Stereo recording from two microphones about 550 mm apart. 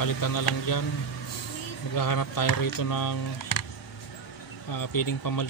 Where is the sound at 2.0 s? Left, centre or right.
Left.